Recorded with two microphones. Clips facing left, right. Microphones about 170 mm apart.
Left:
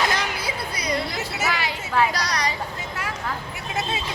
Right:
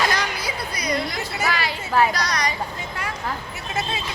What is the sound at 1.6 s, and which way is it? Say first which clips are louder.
Speech: right 3 dB; 15° left (ahead or behind).